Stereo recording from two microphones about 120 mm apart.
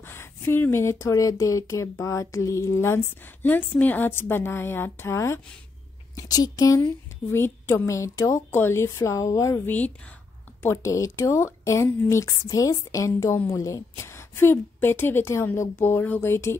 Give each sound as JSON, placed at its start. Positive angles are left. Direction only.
{"t": 0.0, "sound": "a woman's voice", "side_deg": 20}